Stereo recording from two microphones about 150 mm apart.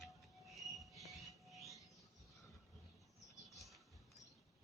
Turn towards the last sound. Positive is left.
turn(degrees=0)  # may be behind; listen again after turning